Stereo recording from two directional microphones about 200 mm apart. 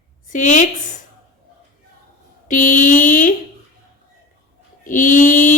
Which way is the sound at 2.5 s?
40° left (ahead or behind).